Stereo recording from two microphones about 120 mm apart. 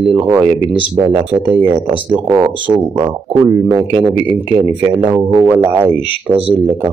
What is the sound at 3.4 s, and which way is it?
Speech, 20° right (ahead or behind).